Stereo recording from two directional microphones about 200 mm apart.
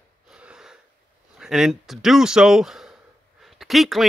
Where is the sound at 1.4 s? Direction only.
Centre (ahead or behind).